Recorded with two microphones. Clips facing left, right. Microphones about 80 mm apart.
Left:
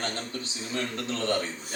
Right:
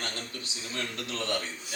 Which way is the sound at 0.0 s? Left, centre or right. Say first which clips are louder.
Left 4 dB; left.